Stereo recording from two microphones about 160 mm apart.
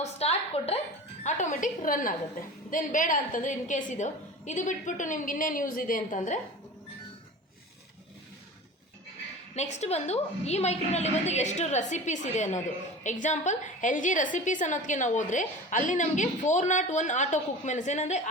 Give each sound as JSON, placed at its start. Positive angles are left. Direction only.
{"t": 0.0, "sound": "a sound", "side_deg": 40}
{"t": 1.2, "sound": "a woman's voice", "side_deg": 45}
{"t": 9.6, "sound": "a woman's voice", "side_deg": 45}